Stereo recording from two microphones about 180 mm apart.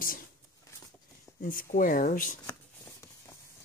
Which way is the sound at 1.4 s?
50° left (ahead or behind).